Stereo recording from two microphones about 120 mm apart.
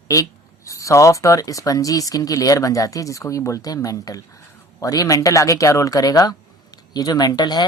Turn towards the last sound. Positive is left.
turn(degrees=35)  # may be behind; listen again after turning